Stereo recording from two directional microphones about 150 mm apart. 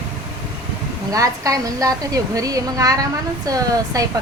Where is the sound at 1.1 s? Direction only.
25° right (ahead or behind).